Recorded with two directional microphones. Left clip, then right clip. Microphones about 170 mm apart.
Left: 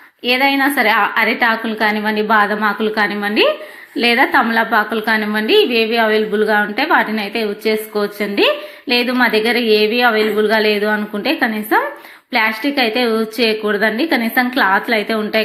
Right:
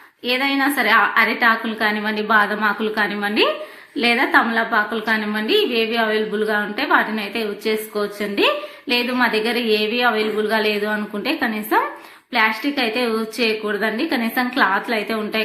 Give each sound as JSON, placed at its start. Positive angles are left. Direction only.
{"t": 0.3, "sound": "a woman's voice", "side_deg": 20}